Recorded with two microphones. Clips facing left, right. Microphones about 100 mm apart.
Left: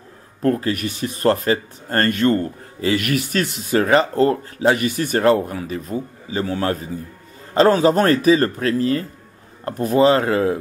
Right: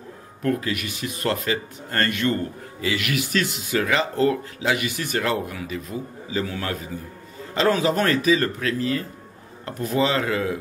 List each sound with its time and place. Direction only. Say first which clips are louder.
0.4 s speech: left 5 dB; 35° left (ahead or behind)